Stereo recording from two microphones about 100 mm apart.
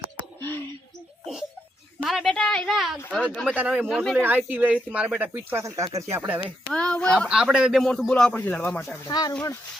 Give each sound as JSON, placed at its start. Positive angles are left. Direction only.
{"t": 0.3, "sound": "a sound", "side_deg": 20}
{"t": 1.2, "sound": "a sound", "side_deg": -5}
{"t": 2.3, "sound": "a woman's voice", "side_deg": 10}
{"t": 3.4, "sound": "a man's voice", "side_deg": -10}
{"t": 3.9, "sound": "speech", "side_deg": 0}
{"t": 4.2, "sound": "speech", "side_deg": -15}
{"t": 6.1, "sound": "a man's voice", "side_deg": -20}
{"t": 6.7, "sound": "speech", "side_deg": 10}
{"t": 7.3, "sound": "a man's voice", "side_deg": -10}
{"t": 7.8, "sound": "speech", "side_deg": 5}
{"t": 9.0, "sound": "speech", "side_deg": 45}